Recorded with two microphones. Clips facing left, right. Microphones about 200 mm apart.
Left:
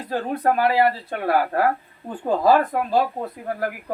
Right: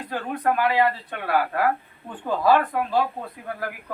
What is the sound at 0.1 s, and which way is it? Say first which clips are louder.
Speech: left 3 dB; 35° left (ahead or behind).